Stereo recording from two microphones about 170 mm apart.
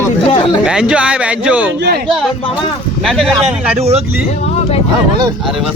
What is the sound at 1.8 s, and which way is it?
Speech, 70° right (ahead or behind).